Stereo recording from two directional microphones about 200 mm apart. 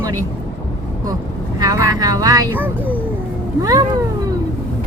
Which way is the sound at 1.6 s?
20° right (ahead or behind).